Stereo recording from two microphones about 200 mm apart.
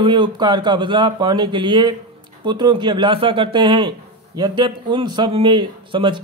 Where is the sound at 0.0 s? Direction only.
25° right (ahead or behind).